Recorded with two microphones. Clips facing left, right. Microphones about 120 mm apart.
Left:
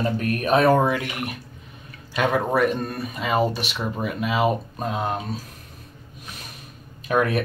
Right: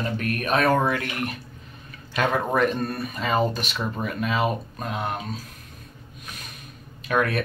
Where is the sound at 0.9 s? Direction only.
15° left (ahead or behind).